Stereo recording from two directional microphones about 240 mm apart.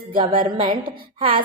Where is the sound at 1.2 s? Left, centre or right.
Right.